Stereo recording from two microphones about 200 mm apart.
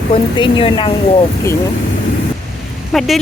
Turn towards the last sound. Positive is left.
turn(degrees=0)  # may be behind; listen again after turning